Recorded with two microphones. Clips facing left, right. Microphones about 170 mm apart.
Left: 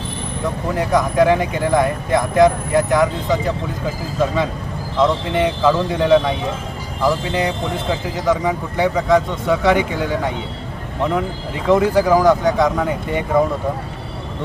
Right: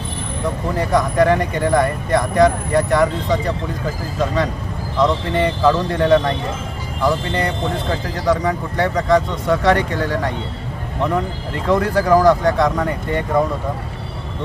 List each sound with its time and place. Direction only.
0.8 s speech: centre (ahead or behind)
4.9 s speech: 5° left (ahead or behind)